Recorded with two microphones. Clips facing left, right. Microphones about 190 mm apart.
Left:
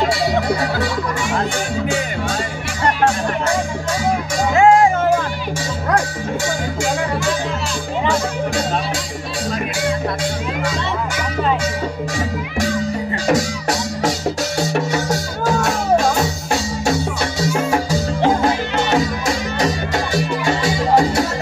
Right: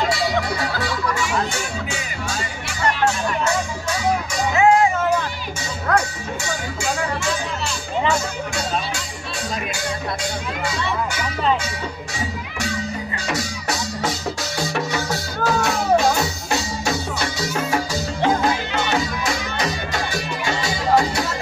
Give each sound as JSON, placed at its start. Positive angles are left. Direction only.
{"t": 4.6, "sound": "music", "side_deg": 50}
{"t": 13.3, "sound": "music", "side_deg": 45}